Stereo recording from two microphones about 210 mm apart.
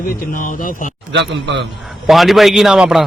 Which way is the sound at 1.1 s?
55° right (ahead or behind).